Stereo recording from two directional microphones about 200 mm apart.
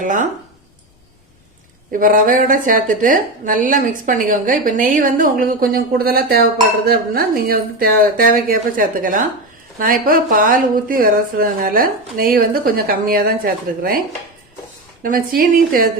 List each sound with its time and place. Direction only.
0.0 s speech: 40° right (ahead or behind)
1.9 s a woman's voice: 45° right (ahead or behind)
15.0 s a woman's voice: 45° right (ahead or behind)